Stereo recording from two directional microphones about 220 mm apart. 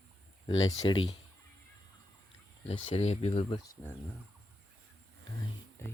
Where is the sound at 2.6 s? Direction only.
30° left (ahead or behind).